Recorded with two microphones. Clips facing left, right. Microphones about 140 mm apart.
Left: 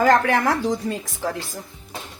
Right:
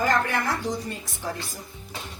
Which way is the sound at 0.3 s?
90° left.